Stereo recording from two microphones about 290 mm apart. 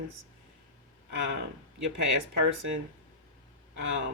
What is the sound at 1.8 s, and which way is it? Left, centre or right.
Speech, right.